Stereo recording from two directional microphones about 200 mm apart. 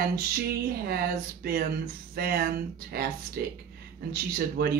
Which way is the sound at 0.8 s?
50° right (ahead or behind).